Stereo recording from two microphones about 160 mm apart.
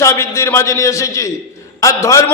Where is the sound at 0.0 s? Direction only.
15° left (ahead or behind).